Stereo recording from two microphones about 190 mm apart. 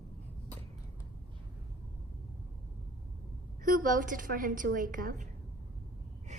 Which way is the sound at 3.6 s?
45° right (ahead or behind).